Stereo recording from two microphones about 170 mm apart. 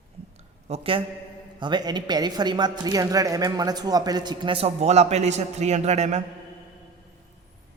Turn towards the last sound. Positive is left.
turn(degrees=-40)  # may be behind; listen again after turning